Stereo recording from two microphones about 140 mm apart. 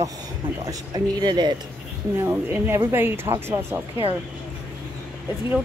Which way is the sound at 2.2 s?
15° right (ahead or behind).